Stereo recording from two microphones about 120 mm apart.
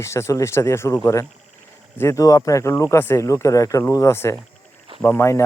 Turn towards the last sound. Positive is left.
turn(degrees=25)  # may be behind; listen again after turning